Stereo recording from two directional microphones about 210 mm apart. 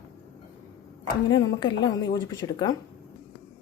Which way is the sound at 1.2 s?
20° left (ahead or behind).